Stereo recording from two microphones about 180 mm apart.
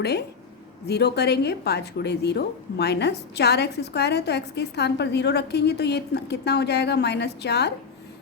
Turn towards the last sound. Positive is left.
turn(degrees=65)  # may be behind; listen again after turning